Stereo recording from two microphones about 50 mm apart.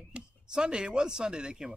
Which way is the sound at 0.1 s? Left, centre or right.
Centre.